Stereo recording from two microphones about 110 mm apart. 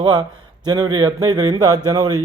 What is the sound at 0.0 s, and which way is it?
Speech, 40° right (ahead or behind).